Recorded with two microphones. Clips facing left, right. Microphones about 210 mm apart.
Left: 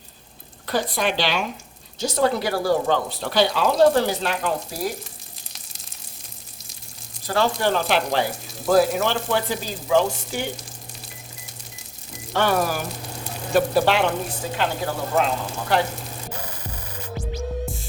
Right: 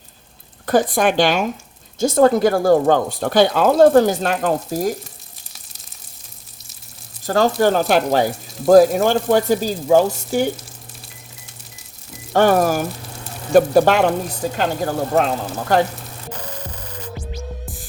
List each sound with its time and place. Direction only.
0.6 s speech: 50° right (ahead or behind)
7.3 s speech: 45° right (ahead or behind)
12.3 s speech: 45° right (ahead or behind)